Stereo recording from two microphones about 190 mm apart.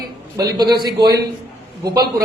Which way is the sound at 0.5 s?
20° right (ahead or behind).